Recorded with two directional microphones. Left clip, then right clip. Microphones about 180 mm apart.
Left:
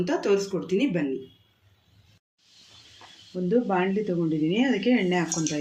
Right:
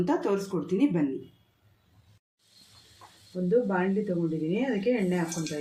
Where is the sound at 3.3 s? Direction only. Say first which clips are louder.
Left 2 dB; 50° left (ahead or behind).